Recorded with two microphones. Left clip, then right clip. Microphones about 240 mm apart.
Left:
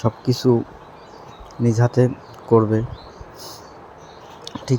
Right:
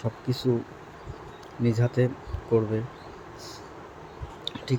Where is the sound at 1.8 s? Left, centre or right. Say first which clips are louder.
Left 8 dB; left.